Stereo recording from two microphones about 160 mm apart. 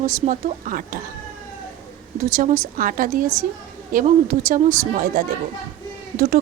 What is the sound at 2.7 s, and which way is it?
A woman's voice, 60° right (ahead or behind).